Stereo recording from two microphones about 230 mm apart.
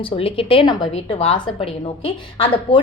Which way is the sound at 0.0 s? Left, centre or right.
Left.